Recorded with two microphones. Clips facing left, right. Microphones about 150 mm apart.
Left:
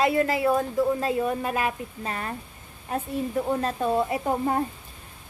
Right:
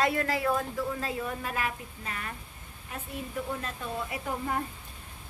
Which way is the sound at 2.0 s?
35° left (ahead or behind).